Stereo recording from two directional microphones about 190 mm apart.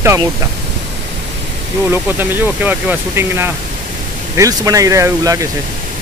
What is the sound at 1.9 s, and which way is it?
Speech, 10° right (ahead or behind).